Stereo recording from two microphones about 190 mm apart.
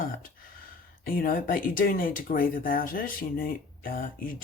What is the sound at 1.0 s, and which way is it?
Speech, 50° left (ahead or behind).